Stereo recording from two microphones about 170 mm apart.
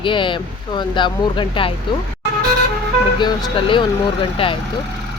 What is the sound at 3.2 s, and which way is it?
Speech, 25° left (ahead or behind).